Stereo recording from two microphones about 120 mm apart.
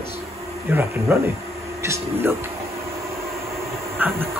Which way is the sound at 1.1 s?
20° right (ahead or behind).